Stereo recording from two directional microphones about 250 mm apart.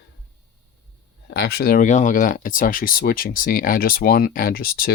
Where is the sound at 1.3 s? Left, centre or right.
Left.